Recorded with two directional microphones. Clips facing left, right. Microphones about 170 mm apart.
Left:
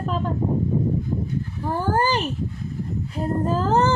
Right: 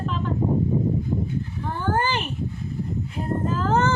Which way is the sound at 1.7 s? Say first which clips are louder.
Left 3 dB; 40° left (ahead or behind).